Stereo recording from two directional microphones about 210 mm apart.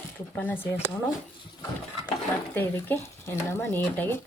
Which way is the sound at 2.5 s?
10° left (ahead or behind).